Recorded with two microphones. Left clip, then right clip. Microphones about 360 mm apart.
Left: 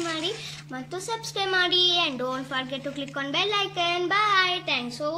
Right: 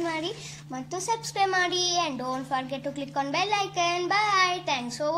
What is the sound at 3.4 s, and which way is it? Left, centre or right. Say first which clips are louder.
Child singing: left 2 dB; centre.